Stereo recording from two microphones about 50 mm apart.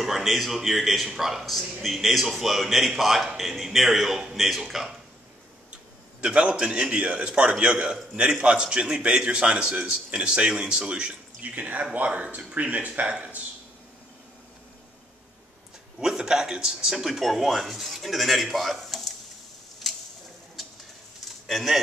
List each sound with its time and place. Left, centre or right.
0.0 s a man's voice: centre
6.2 s a man's voice: centre
11.5 s a man's voice: right
16.0 s a man's voice: centre
19.8 s a sound: centre